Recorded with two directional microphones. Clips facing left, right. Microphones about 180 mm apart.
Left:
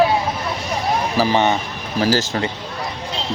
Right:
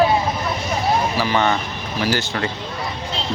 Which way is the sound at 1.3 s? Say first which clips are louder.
Even; 20° left (ahead or behind).